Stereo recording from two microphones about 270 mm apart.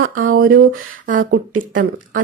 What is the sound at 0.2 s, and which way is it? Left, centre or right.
Speech, right.